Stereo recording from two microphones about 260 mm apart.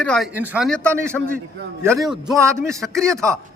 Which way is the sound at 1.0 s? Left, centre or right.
Centre.